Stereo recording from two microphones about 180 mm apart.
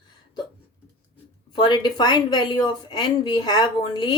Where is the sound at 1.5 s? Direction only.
25° left (ahead or behind).